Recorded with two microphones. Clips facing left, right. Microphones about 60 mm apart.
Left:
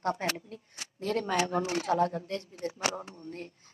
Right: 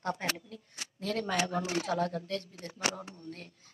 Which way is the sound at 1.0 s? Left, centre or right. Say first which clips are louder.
Left 3 dB; centre.